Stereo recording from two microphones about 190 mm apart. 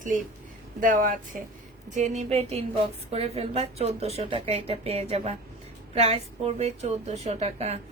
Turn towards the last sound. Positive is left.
turn(degrees=-35)  # may be behind; listen again after turning